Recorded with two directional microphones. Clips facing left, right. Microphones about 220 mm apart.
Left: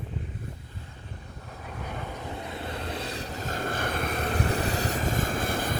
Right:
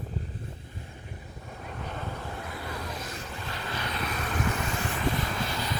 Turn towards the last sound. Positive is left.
turn(degrees=50)  # may be behind; listen again after turning